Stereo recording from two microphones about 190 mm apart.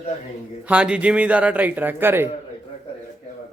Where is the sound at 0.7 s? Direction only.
5° right (ahead or behind).